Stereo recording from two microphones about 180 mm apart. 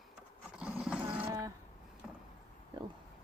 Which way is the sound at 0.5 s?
5° right (ahead or behind).